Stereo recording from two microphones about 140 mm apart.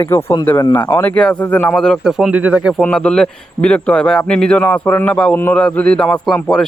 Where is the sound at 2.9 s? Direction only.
5° left (ahead or behind).